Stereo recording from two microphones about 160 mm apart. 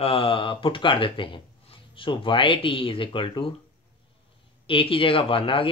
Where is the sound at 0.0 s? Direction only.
35° left (ahead or behind).